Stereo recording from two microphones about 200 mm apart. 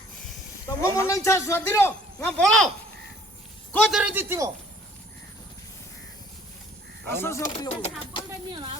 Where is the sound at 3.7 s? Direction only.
Centre (ahead or behind).